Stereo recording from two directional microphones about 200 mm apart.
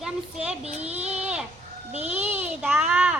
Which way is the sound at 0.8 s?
30° right (ahead or behind).